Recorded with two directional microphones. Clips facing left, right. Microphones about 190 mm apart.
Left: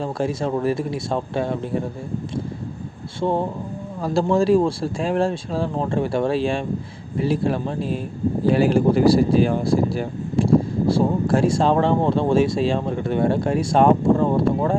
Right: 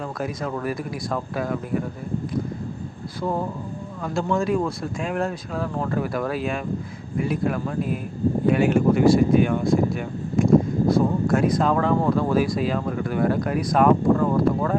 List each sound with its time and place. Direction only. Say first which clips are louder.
0.0 s speech: left 5 dB; 30° left (ahead or behind)
3.2 s speech: left 4 dB; 25° left (ahead or behind)